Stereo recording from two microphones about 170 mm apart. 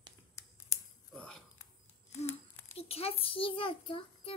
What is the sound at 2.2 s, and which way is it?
A child's voice, 40° left (ahead or behind).